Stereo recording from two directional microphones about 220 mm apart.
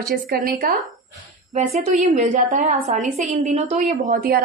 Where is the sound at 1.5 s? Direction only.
30° right (ahead or behind).